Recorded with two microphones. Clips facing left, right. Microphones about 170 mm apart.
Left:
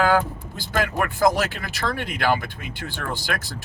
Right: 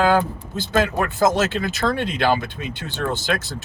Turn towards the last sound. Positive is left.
turn(degrees=-20)  # may be behind; listen again after turning